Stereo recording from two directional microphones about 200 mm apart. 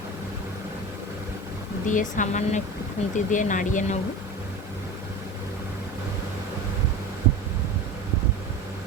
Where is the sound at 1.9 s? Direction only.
40° left (ahead or behind).